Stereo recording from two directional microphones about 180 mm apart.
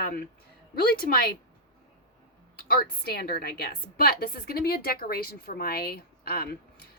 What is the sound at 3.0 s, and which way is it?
A woman's voice, 55° left (ahead or behind).